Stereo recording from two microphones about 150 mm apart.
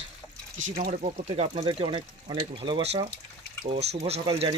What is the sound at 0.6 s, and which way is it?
Speech, 55° right (ahead or behind).